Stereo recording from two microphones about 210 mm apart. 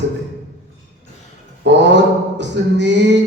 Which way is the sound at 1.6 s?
55° right (ahead or behind).